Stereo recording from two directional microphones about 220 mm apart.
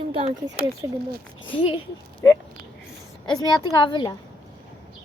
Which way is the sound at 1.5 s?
25° left (ahead or behind).